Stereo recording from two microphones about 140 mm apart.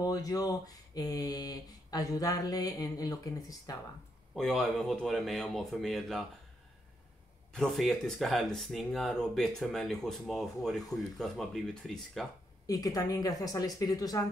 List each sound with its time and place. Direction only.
0.0 s speech: 25° left (ahead or behind)
4.4 s speech: 5° left (ahead or behind)
7.5 s speech: centre (ahead or behind)
12.6 s speech: 25° left (ahead or behind)